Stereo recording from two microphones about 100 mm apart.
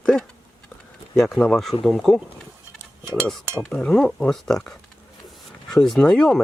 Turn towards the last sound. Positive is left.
turn(degrees=5)  # may be behind; listen again after turning